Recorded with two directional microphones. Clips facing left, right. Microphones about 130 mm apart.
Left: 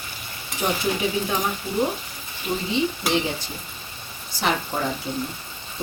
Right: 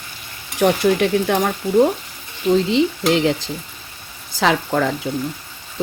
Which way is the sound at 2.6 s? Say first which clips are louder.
Right 7 dB; 90° right.